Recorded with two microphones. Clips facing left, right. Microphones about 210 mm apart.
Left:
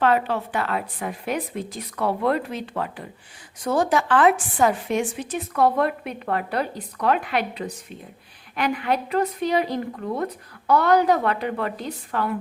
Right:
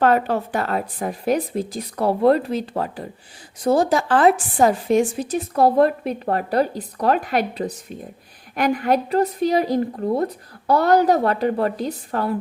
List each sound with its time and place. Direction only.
0.0 s speech: 45° right (ahead or behind)